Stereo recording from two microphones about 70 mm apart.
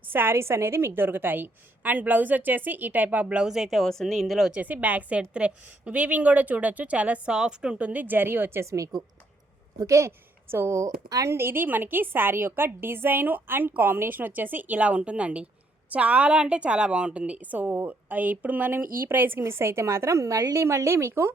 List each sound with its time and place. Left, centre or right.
0.1 s a woman's voice: right; by 4.5 s centre
4.5 s a woman's voice: right
10.1 s a woman's voice: right
11.3 s a woman's voice: right